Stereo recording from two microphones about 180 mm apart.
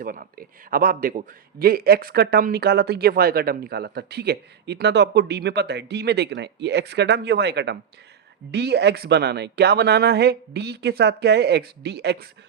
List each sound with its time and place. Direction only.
0.0 s a man's voice: 50° right (ahead or behind)